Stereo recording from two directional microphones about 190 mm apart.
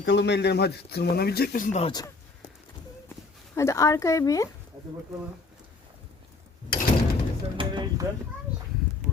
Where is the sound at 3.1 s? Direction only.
15° left (ahead or behind).